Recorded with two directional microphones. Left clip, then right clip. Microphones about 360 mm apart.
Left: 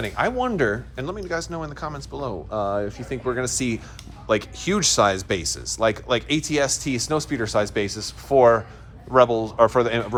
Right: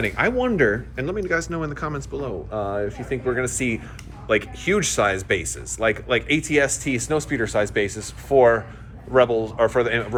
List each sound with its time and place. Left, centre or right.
0.0 s a man's voice: centre